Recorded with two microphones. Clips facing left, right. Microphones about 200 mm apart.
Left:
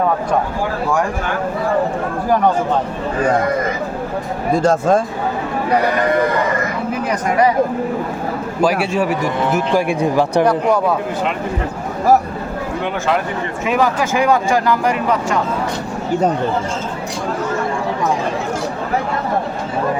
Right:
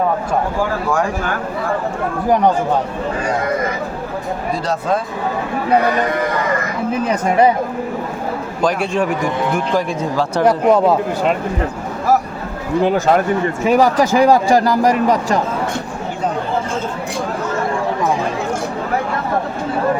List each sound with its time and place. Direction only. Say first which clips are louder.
4.5 s speech: left 7 dB; 50° left (ahead or behind)
7.1 s speech: right 2 dB; 25° right (ahead or behind)
8.6 s a man's voice: left 1 dB; 5° left (ahead or behind)
10.4 s speech: right 2 dB; 20° right (ahead or behind)
12.8 s speech: right 6 dB; 40° right (ahead or behind)